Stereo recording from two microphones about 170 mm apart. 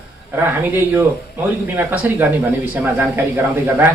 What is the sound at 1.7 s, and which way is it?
Speech, 10° right (ahead or behind).